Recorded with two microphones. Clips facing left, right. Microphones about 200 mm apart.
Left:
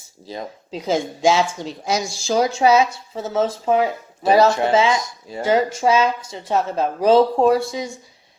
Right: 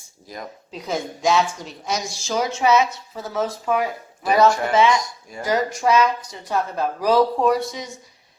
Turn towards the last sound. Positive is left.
turn(degrees=30)  # may be behind; listen again after turning